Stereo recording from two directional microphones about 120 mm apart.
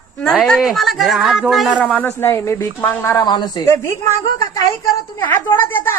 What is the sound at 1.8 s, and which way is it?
Speech, 15° left (ahead or behind).